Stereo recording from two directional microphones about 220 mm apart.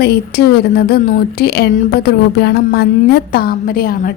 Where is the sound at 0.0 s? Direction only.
45° left (ahead or behind).